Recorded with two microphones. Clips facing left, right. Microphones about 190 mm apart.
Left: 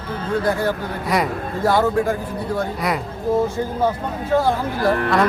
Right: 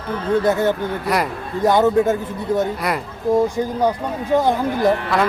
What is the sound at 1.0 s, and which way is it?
Speech, centre (ahead or behind).